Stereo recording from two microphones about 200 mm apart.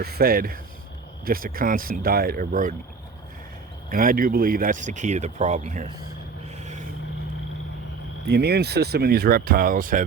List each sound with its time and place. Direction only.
0.0 s speech: 50° right (ahead or behind)
3.8 s speech: 45° right (ahead or behind)
6.6 s vehicle: 35° right (ahead or behind)
8.3 s speech: 55° right (ahead or behind)